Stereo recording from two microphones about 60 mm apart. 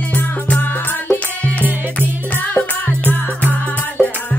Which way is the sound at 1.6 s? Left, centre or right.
Right.